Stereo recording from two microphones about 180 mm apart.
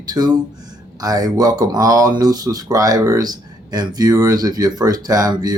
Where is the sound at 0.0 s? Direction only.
20° right (ahead or behind).